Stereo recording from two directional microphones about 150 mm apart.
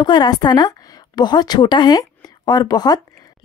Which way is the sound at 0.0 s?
30° left (ahead or behind).